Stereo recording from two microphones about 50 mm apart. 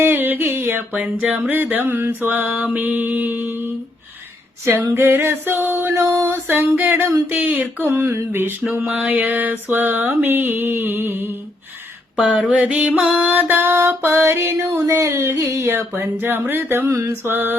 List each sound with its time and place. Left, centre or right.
0.0 s a sound: right
0.9 s a sound: right
1.5 s mantra: right
4.9 s music: right
7.0 s music: right
7.3 s mantra: right
7.8 s a sound: right
8.3 s music: right
8.7 s mantra: right
12.1 s a sound: right
13.2 s mantra: right
13.7 s music: right
16.0 s music: right